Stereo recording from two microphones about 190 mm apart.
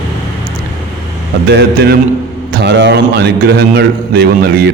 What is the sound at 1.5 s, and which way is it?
A man's voice, 60° right (ahead or behind).